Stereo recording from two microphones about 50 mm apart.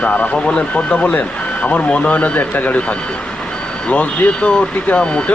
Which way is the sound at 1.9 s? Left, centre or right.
Left.